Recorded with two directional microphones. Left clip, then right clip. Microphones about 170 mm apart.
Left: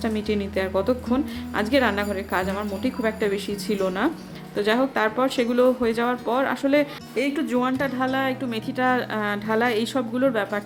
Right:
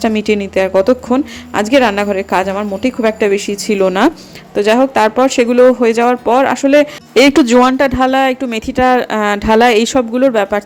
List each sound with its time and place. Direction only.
0.0 s speech: 50° right (ahead or behind)
7.1 s speech: 55° right (ahead or behind); by 10.6 s 40° right (ahead or behind)